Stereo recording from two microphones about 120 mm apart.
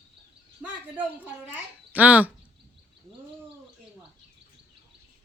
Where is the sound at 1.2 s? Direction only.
15° right (ahead or behind).